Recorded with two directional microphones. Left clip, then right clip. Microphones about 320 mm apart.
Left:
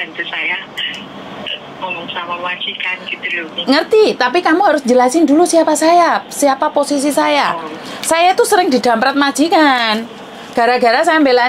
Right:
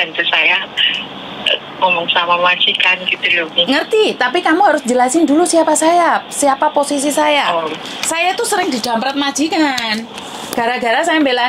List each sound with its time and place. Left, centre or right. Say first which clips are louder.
0.0 s speech: right 7 dB; right
3.6 s a woman's voice: left 8 dB; left
7.0 s a woman's voice: left 1 dB; left
8.1 s a woman's voice: left 5 dB; left
8.8 s a woman's voice: left 4 dB; left
10.6 s a woman's voice: left 4 dB; left